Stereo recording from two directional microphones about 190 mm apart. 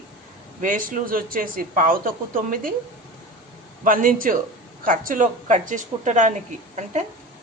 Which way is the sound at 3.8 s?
45° right (ahead or behind).